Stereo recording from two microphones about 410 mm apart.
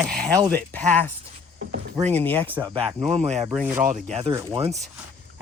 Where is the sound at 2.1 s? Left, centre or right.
Centre.